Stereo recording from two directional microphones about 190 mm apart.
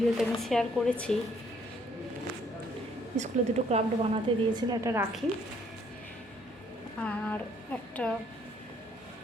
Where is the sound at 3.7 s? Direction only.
35° right (ahead or behind).